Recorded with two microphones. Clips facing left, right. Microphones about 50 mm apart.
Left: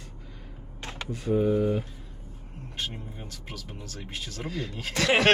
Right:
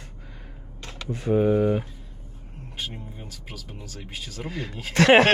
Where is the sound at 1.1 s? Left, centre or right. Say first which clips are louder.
Right 4 dB; right.